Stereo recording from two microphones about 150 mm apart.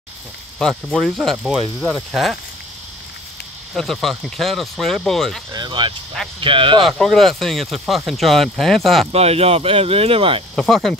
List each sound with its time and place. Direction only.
0.6 s speech: centre (ahead or behind)
3.7 s speech: centre (ahead or behind)
5.5 s speech: 30° right (ahead or behind)
6.8 s speech: centre (ahead or behind)
9.1 s speech: 40° right (ahead or behind)
10.5 s speech: 5° left (ahead or behind)